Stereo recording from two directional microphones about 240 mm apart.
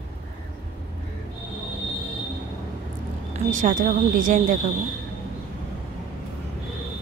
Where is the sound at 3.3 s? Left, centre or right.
Right.